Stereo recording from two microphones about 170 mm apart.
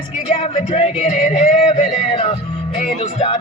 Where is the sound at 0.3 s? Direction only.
40° left (ahead or behind).